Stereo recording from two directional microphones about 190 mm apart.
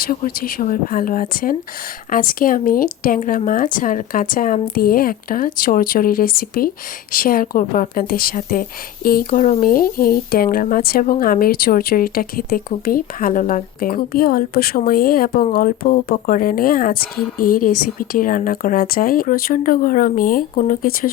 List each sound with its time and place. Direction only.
0.0 s speech: 50° left (ahead or behind)